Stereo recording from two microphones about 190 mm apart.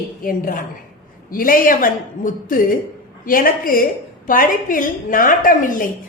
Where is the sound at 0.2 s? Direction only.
45° left (ahead or behind).